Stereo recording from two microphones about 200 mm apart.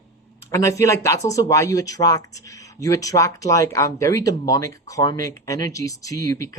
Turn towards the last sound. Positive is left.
turn(degrees=15)  # may be behind; listen again after turning